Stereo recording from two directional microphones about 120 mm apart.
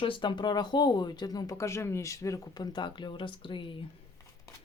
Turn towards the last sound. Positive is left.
turn(degrees=45)  # may be behind; listen again after turning